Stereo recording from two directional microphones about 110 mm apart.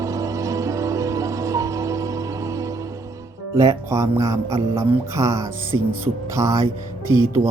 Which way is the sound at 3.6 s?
30° right (ahead or behind).